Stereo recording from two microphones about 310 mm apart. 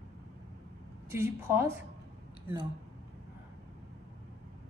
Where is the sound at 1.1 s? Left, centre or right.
Centre.